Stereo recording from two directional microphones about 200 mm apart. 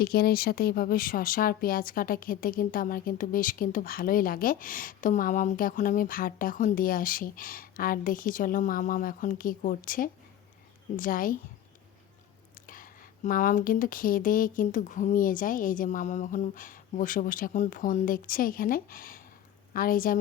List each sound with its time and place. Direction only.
0.0 s speech: 50° left (ahead or behind)
12.6 s speech: 45° left (ahead or behind)